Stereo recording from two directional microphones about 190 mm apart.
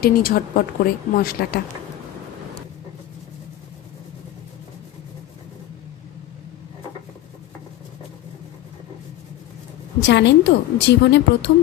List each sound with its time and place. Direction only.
0.0 s a woman's voice: 50° left (ahead or behind)
10.0 s a woman's voice: 65° left (ahead or behind)